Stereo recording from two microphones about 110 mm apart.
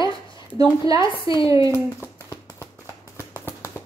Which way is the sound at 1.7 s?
25° left (ahead or behind).